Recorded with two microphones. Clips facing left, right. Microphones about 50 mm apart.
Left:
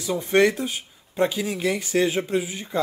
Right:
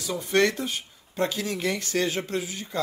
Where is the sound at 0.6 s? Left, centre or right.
Centre.